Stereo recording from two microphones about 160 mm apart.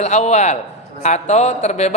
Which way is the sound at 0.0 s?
45° left (ahead or behind).